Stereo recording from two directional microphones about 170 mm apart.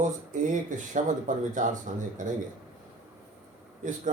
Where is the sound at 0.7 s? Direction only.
50° right (ahead or behind).